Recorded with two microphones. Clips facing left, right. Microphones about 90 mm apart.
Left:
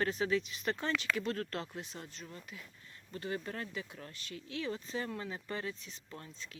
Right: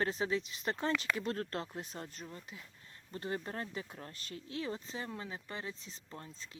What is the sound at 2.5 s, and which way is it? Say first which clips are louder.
Speech: left 1 dB; 25° right (ahead or behind).